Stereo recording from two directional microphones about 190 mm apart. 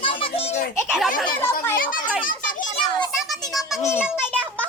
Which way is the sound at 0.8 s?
5° right (ahead or behind).